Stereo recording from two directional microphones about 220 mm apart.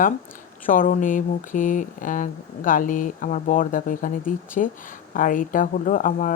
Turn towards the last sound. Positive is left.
turn(degrees=35)  # may be behind; listen again after turning